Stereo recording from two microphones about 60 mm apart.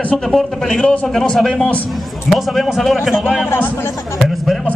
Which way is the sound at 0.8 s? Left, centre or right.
Left.